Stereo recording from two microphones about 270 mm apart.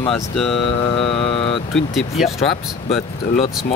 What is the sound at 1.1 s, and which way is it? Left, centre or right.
Speech, left.